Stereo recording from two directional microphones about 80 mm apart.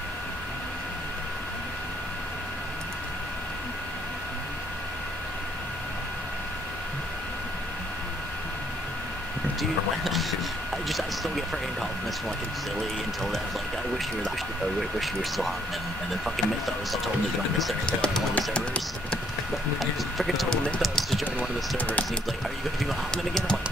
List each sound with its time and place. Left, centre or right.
9.6 s speech: centre
15.0 s speech: centre
17.8 s speech: centre
19.8 s speech: centre
20.8 s a sound: centre
21.4 s speech: centre
23.1 s speech: centre